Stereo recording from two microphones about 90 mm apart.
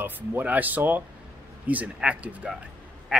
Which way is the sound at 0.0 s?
20° right (ahead or behind).